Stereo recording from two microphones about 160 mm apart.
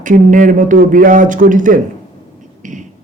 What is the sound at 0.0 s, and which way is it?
Speech, 55° right (ahead or behind).